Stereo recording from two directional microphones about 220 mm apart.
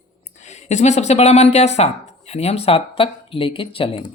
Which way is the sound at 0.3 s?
30° left (ahead or behind).